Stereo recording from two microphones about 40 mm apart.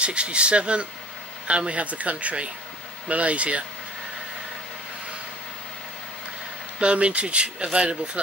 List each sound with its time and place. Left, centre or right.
0.0 s speech: right
6.8 s speech: right